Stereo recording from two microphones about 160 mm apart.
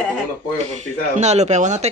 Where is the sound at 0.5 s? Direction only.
45° right (ahead or behind).